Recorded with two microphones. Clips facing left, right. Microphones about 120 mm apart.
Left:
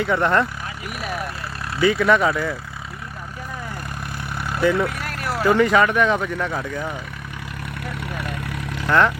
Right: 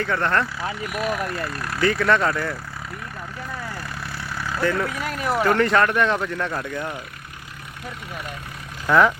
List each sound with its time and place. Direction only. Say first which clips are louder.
0.0 s speech: left 3 dB; 15° left (ahead or behind)
1.8 s speech: left 3 dB; 5° left (ahead or behind)
4.4 s vehicle: left 4 dB; 20° left (ahead or behind)
4.9 s speech: right 2 dB; centre (ahead or behind)
8.1 s speech: left 3 dB; 70° left (ahead or behind)
8.9 s speech: right 1 dB; 5° right (ahead or behind)